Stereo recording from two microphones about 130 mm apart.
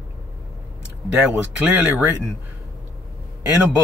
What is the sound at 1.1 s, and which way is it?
Speech, 10° right (ahead or behind).